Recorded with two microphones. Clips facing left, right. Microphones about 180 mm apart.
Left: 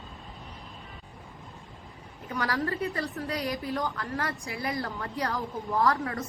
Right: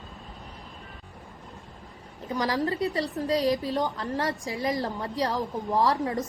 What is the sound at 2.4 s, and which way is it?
A woman's voice, 20° right (ahead or behind).